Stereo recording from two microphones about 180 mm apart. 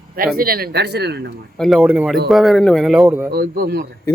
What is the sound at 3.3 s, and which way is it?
Speech, 60° right (ahead or behind).